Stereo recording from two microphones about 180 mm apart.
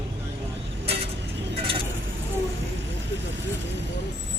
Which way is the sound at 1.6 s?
30° right (ahead or behind).